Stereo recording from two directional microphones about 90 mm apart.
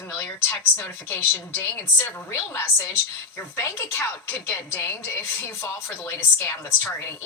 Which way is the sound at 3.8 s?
30° left (ahead or behind).